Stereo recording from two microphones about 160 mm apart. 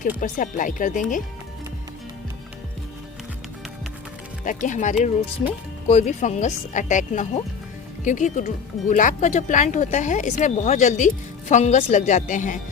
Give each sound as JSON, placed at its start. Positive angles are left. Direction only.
{"t": 0.2, "sound": "speech", "side_deg": 55}
{"t": 4.4, "sound": "speech", "side_deg": 50}